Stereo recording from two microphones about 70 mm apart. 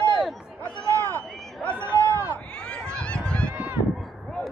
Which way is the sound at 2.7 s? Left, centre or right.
Centre.